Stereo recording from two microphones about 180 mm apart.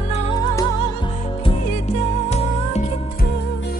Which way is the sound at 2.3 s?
40° left (ahead or behind).